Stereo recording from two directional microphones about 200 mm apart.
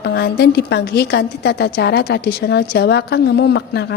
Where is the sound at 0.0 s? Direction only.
55° left (ahead or behind).